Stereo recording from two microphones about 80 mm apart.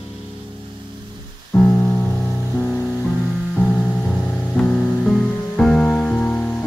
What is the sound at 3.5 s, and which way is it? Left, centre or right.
Music, left.